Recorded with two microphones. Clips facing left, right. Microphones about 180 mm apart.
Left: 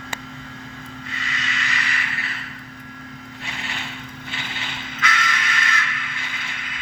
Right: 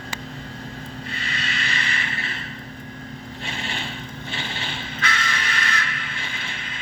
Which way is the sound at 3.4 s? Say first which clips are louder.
Right 2 dB; 30° right (ahead or behind).